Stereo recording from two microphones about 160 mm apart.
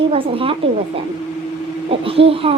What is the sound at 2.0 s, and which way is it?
Speech, 35° right (ahead or behind).